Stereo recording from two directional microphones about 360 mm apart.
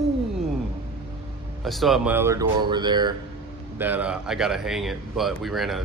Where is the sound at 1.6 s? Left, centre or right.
Centre.